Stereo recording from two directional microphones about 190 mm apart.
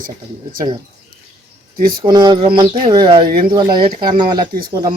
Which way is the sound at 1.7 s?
50° right (ahead or behind).